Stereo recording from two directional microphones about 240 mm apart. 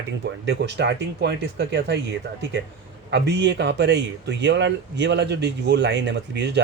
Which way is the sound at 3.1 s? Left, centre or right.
Right.